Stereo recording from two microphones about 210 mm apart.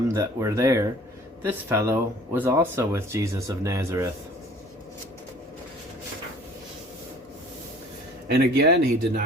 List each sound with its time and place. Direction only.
0.1 s speech: 15° right (ahead or behind)
8.3 s speech: 50° right (ahead or behind)